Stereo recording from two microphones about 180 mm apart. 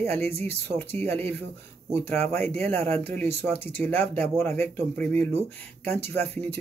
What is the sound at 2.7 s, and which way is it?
Speech, 35° right (ahead or behind).